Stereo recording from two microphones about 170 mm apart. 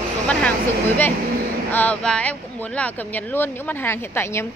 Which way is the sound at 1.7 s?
5° left (ahead or behind).